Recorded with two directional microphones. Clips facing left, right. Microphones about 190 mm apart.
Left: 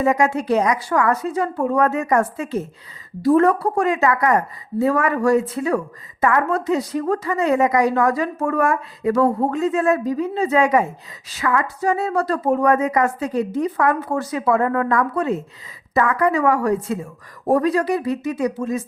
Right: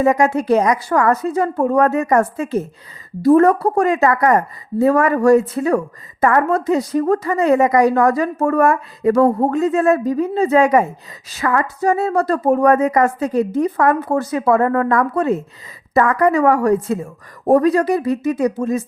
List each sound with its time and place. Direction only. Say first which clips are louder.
0.0 s a woman's voice: right 3 dB; 40° right (ahead or behind)